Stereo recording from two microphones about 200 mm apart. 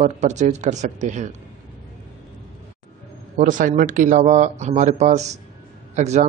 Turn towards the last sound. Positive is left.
turn(degrees=-35)  # may be behind; listen again after turning